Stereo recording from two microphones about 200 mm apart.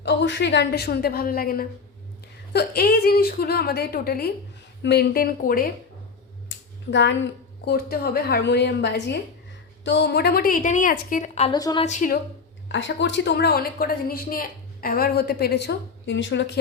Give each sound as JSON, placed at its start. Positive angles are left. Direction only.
{"t": 0.0, "sound": "a woman's voice", "side_deg": 60}
{"t": 6.5, "sound": "a sound", "side_deg": 65}
{"t": 7.6, "sound": "a woman's voice", "side_deg": 50}
{"t": 11.5, "sound": "a woman's voice", "side_deg": 20}
{"t": 11.9, "sound": "a woman's voice", "side_deg": 40}
{"t": 12.6, "sound": "a woman's voice", "side_deg": 65}